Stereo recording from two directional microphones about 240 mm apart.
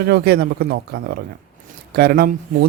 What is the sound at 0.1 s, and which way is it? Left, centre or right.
Speech, right.